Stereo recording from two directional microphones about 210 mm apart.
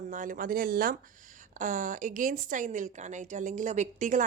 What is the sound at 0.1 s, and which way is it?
A woman's voice, 40° right (ahead or behind).